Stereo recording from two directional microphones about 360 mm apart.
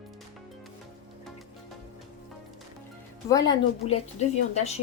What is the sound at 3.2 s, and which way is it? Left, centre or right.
Speech, centre.